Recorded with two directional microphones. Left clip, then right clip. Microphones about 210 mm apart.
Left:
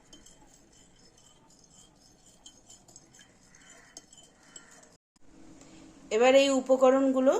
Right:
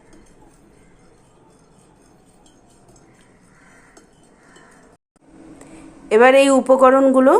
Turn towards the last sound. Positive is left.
turn(degrees=-25)  # may be behind; listen again after turning